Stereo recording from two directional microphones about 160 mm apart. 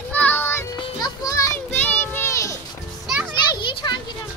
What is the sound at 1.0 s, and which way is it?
Music, 20° left (ahead or behind).